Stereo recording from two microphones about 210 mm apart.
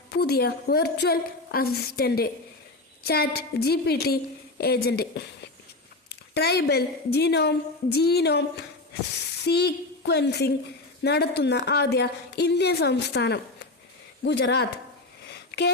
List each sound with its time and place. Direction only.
0.1 s a woman's voice: 50° left (ahead or behind)
6.3 s a woman's voice: 50° left (ahead or behind)
15.3 s a sound: 50° left (ahead or behind)